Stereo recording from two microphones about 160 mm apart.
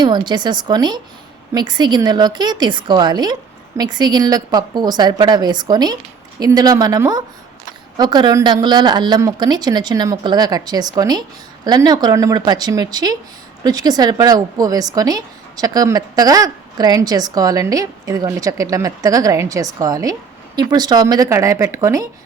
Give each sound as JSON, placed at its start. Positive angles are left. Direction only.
{"t": 0.0, "sound": "a woman's voice", "side_deg": -25}